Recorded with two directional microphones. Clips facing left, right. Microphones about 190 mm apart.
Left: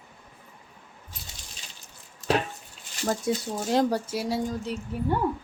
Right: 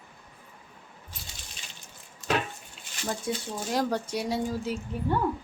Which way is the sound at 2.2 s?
35° left (ahead or behind).